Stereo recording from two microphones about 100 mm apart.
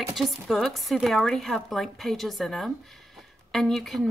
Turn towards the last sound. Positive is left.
turn(degrees=0)  # may be behind; listen again after turning